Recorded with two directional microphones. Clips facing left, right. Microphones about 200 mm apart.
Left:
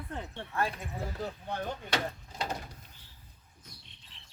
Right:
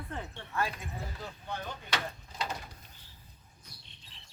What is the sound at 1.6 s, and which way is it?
Speech, 45° left (ahead or behind).